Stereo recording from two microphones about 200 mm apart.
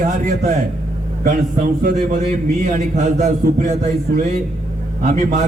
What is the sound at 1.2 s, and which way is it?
A man's voice, 40° right (ahead or behind).